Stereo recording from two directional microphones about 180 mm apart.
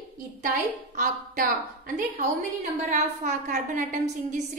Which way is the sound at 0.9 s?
50° right (ahead or behind).